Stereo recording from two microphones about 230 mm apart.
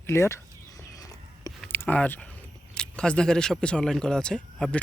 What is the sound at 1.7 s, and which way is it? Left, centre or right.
Speech, centre.